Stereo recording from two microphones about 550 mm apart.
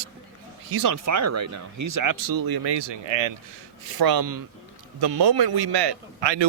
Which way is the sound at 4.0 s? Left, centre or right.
Right.